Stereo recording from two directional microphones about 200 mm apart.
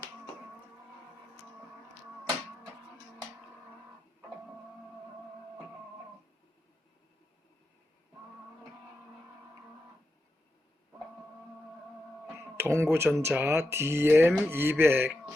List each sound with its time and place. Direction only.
12.5 s speech: 10° right (ahead or behind)